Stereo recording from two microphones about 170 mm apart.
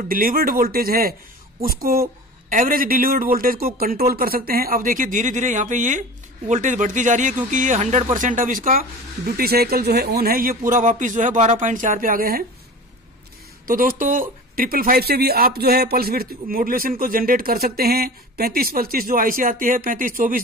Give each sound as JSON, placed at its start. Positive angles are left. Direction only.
{"t": 0.1, "sound": "speech", "side_deg": -60}
{"t": 13.7, "sound": "speech", "side_deg": -55}